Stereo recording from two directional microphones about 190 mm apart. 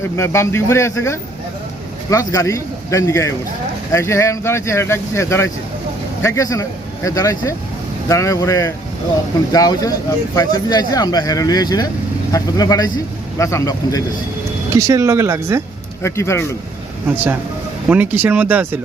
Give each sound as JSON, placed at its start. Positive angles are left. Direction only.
{"t": 0.2, "sound": "speech", "side_deg": 15}
{"t": 14.8, "sound": "speech", "side_deg": -15}
{"t": 16.0, "sound": "speech", "side_deg": 15}
{"t": 17.8, "sound": "speech", "side_deg": -10}